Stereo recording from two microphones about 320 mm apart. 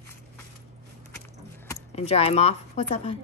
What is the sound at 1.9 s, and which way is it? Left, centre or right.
Speech, centre.